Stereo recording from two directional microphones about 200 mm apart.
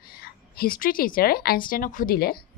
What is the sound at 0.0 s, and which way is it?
A woman's voice, 50° left (ahead or behind).